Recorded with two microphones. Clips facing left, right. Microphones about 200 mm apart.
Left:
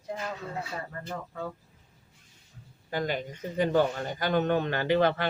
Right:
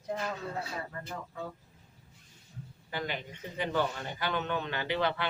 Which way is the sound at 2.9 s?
45° left (ahead or behind).